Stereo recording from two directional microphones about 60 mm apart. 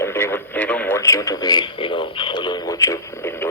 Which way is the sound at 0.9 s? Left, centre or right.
Left.